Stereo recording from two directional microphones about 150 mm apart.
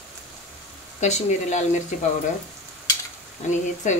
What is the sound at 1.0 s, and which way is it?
Speech, 50° left (ahead or behind).